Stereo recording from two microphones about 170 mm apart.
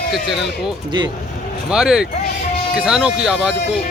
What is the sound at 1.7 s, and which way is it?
Speech, 5° right (ahead or behind).